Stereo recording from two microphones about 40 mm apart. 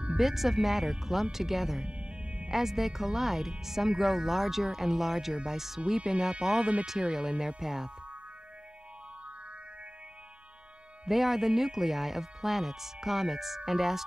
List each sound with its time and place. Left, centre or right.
0.2 s speech: centre
1.9 s music: right
2.5 s speech: centre
11.1 s speech: centre